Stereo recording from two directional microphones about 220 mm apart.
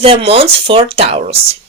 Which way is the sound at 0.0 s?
25° right (ahead or behind).